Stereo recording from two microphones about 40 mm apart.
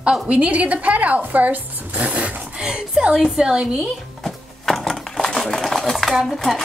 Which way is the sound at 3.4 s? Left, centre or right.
Right.